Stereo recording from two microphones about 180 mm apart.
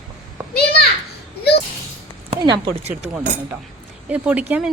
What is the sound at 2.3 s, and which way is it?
Speech, 30° right (ahead or behind).